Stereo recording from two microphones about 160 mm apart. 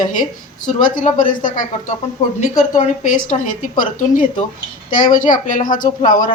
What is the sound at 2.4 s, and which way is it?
A woman's voice, 50° left (ahead or behind).